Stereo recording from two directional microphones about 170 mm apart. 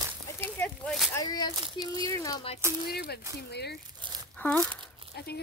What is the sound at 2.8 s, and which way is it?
Speech, 70° left (ahead or behind).